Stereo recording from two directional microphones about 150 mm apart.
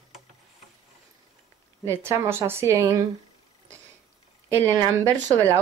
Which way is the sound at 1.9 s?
15° right (ahead or behind).